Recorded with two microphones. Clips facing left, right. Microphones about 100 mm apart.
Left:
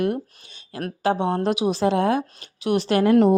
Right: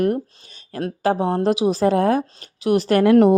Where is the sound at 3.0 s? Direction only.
60° right (ahead or behind).